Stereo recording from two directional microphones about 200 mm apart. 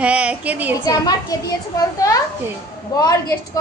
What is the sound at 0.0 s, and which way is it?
Speech, 5° right (ahead or behind).